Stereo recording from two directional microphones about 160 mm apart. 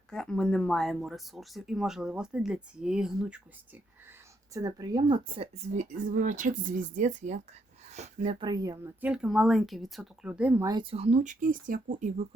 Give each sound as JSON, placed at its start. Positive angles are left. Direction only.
{"t": 0.1, "sound": "speech", "side_deg": 5}
{"t": 4.5, "sound": "speech", "side_deg": -25}
{"t": 8.4, "sound": "speech", "side_deg": -25}
{"t": 9.0, "sound": "speech", "side_deg": -5}
{"t": 10.7, "sound": "speech", "side_deg": -30}